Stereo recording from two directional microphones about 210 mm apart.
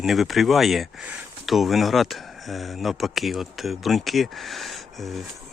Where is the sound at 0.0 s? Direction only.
Centre (ahead or behind).